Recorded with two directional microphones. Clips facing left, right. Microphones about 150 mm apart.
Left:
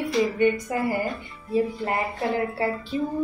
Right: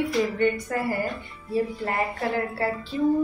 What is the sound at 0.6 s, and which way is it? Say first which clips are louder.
Speech: left 2 dB; 15° left (ahead or behind).